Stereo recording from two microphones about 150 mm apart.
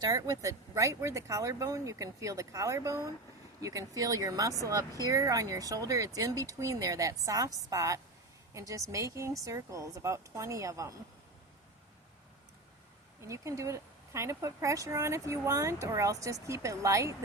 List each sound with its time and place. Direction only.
0.0 s speech: 25° right (ahead or behind)
13.2 s speech: 20° right (ahead or behind)